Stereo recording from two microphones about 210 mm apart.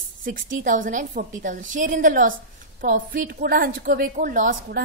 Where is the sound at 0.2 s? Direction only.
40° right (ahead or behind).